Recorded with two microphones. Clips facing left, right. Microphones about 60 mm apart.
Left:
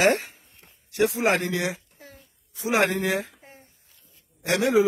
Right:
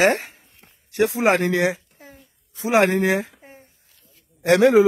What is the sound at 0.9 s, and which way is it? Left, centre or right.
Speech, right.